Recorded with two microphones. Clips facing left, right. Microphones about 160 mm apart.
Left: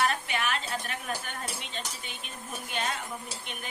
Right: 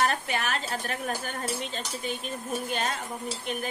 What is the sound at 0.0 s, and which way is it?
A woman's voice, 40° right (ahead or behind).